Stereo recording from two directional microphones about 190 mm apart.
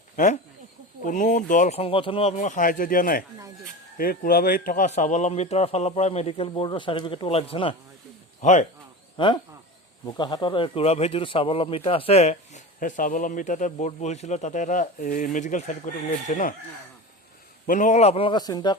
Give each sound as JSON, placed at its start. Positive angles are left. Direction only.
{"t": 1.0, "sound": "speech", "side_deg": 40}
{"t": 9.1, "sound": "speech", "side_deg": 25}
{"t": 17.7, "sound": "a man's voice", "side_deg": 40}